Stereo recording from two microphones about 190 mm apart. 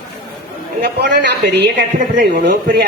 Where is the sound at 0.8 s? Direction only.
60° right (ahead or behind).